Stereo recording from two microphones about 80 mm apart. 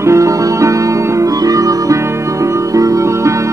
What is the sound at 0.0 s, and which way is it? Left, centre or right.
Music, right.